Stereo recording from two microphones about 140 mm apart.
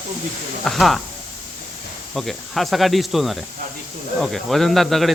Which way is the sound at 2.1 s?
Centre (ahead or behind).